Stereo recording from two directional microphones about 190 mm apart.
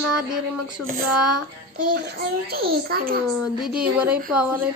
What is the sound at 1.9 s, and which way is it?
A child's voice, 55° right (ahead or behind).